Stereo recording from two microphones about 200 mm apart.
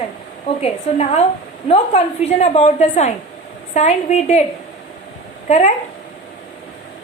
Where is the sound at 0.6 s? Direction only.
30° left (ahead or behind).